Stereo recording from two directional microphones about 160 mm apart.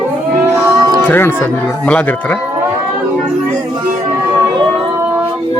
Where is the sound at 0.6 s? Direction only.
25° right (ahead or behind).